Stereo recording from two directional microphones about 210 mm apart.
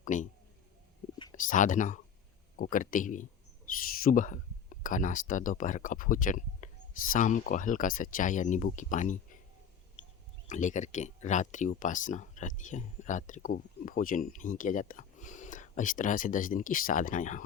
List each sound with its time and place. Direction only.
0.0 s speech: 35° left (ahead or behind)
1.3 s speech: 40° left (ahead or behind)
3.7 s a sound: 40° left (ahead or behind)
4.0 s speech: 40° left (ahead or behind)
10.5 s speech: 35° left (ahead or behind)